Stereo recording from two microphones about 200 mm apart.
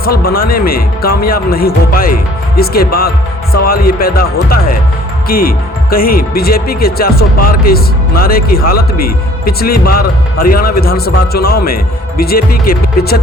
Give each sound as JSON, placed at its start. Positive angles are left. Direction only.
{"t": 0.0, "sound": "speech", "side_deg": 50}